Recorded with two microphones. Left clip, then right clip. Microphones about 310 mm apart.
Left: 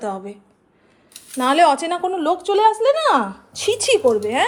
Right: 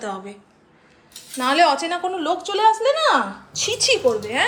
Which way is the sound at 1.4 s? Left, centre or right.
Centre.